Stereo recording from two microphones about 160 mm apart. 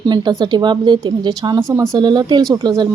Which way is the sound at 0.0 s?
25° right (ahead or behind).